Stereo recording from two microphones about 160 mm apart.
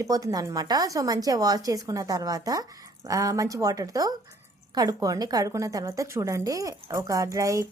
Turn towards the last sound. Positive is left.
turn(degrees=-20)  # may be behind; listen again after turning